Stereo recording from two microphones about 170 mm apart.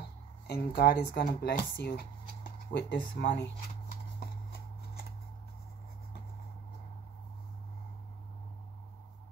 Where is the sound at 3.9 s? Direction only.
65° left (ahead or behind).